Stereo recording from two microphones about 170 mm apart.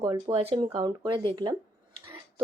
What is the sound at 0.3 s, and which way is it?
Speech, 35° right (ahead or behind).